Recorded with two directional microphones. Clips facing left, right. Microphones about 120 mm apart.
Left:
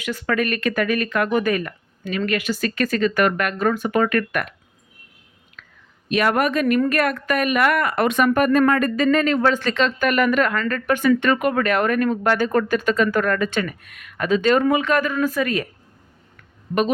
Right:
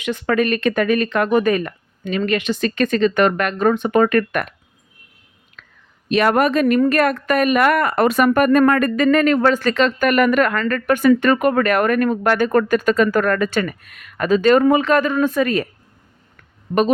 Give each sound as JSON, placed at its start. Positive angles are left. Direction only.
{"t": 0.0, "sound": "speech", "side_deg": -20}
{"t": 5.6, "sound": "whispering", "side_deg": -30}
{"t": 6.1, "sound": "a woman's voice", "side_deg": -35}
{"t": 8.3, "sound": "speech", "side_deg": -55}